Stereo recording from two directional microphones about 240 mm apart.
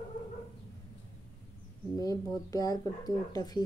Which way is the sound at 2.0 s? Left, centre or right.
Centre.